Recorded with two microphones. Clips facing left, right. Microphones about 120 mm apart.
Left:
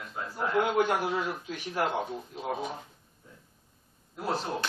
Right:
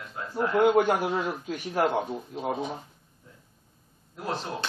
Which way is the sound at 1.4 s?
45° right (ahead or behind).